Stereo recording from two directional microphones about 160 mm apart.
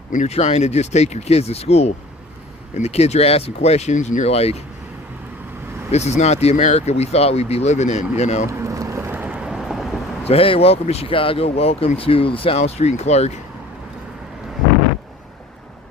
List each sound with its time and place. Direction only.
0.1 s speech: 45° left (ahead or behind)
5.9 s speech: 45° left (ahead or behind)
8.4 s vehicle: 20° right (ahead or behind); by 10.0 s centre (ahead or behind)
10.2 s speech: 35° left (ahead or behind)